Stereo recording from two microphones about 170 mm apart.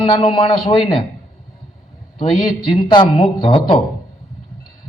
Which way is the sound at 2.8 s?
30° left (ahead or behind).